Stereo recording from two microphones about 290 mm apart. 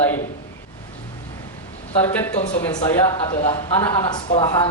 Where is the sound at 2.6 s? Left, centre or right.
Centre.